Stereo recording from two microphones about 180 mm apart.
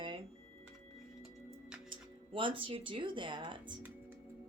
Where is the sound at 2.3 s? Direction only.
30° right (ahead or behind).